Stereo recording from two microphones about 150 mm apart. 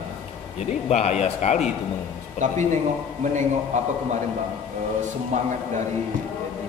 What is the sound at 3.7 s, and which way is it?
Speech, 55° right (ahead or behind).